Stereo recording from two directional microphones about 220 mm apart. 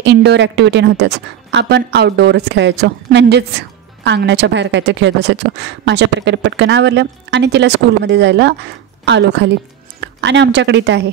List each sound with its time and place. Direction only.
0.0 s a woman's voice: 50° right (ahead or behind)